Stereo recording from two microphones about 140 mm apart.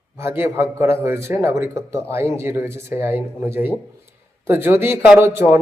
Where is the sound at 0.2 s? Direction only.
20° right (ahead or behind).